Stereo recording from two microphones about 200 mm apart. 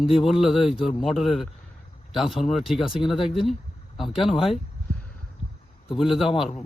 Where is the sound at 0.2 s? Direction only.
Centre (ahead or behind).